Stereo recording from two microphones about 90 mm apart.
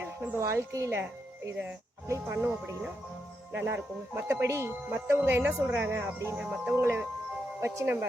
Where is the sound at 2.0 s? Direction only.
30° right (ahead or behind).